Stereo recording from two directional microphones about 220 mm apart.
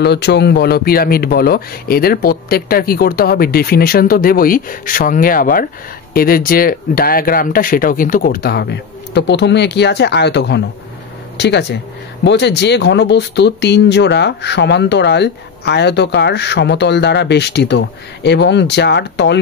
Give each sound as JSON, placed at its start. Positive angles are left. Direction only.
{"t": 0.0, "sound": "speech", "side_deg": 50}